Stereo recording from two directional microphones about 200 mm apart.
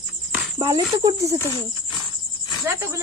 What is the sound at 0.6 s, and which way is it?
Speech, 20° right (ahead or behind).